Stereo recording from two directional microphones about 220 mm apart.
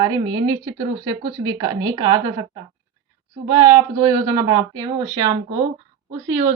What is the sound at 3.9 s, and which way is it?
A woman's voice, 15° right (ahead or behind).